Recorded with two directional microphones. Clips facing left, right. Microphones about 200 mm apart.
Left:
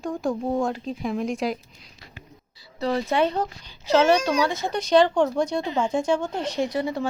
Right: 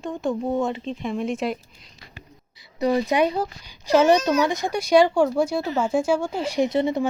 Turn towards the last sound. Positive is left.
turn(degrees=-20)  # may be behind; listen again after turning